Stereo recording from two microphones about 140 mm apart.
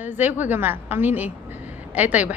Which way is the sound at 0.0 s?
15° right (ahead or behind).